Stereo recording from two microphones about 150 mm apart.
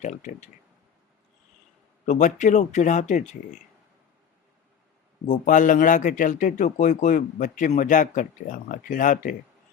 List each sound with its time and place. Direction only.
0.0 s speech: 50° left (ahead or behind)
2.0 s speech: 55° left (ahead or behind)
5.3 s a man's voice: 60° left (ahead or behind)